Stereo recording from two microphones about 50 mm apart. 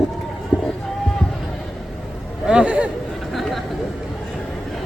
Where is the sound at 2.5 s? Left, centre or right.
Right.